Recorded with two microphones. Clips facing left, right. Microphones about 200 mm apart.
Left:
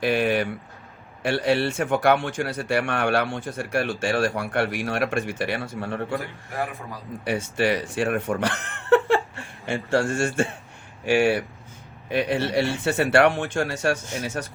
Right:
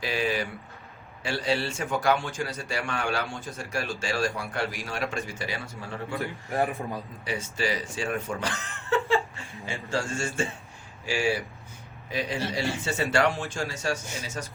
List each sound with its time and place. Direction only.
0.0 s speech: 60° left (ahead or behind)
7.3 s speech: 60° left (ahead or behind)
8.9 s a sound: 65° left (ahead or behind)
9.6 s speech: 65° left (ahead or behind)